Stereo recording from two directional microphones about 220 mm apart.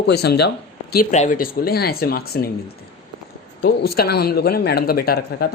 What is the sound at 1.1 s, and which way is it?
Speech, 35° left (ahead or behind).